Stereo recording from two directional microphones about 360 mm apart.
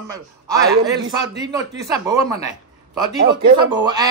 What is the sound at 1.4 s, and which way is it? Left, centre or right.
Speech, centre.